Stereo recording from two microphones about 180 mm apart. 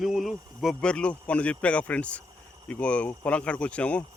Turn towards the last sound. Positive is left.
turn(degrees=5)  # may be behind; listen again after turning